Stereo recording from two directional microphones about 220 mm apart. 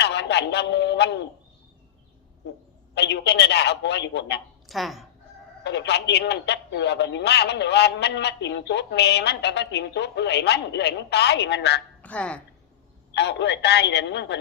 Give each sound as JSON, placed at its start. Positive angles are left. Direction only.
{"t": 0.0, "sound": "a man's voice", "side_deg": 50}
{"t": 2.9, "sound": "a man's voice", "side_deg": 50}
{"t": 4.7, "sound": "speech", "side_deg": 0}
{"t": 5.6, "sound": "a man's voice", "side_deg": 50}
{"t": 12.0, "sound": "speech", "side_deg": 5}
{"t": 13.1, "sound": "a man's voice", "side_deg": 50}